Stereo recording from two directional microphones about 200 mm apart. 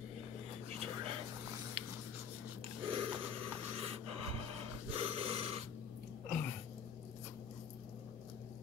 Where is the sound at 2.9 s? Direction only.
25° right (ahead or behind).